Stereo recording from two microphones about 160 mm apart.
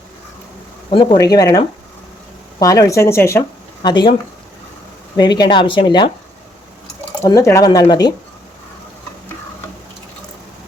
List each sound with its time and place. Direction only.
0.9 s speech: 30° left (ahead or behind)
3.8 s speech: 30° left (ahead or behind)
5.1 s speech: 25° left (ahead or behind)
7.3 s speech: 20° left (ahead or behind)